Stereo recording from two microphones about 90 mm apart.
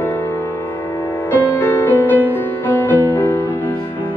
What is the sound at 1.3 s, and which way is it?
Music, 20° left (ahead or behind).